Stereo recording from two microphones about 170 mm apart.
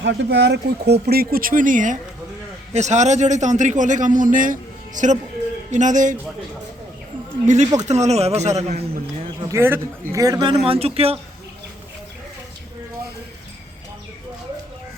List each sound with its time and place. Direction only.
0.0 s speech: 90° right
1.0 s a man's voice: 65° right (ahead or behind); by 6.1 s 50° right (ahead or behind)
7.4 s a man's voice: 45° right (ahead or behind)
9.4 s a man's voice: 15° right (ahead or behind)
10.7 s a man's voice: 35° right (ahead or behind)